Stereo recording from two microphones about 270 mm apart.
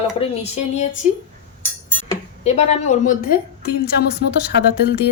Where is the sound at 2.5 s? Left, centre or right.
Left.